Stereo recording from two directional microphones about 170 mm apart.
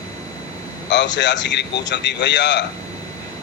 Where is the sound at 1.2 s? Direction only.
90° left.